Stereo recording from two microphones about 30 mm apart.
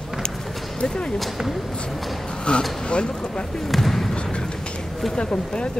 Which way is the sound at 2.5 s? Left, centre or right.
Left.